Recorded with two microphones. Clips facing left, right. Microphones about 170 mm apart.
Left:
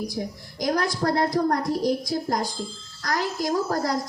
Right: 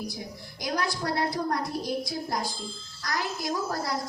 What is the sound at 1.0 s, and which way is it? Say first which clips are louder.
Speech: left 7 dB; 55° left (ahead or behind).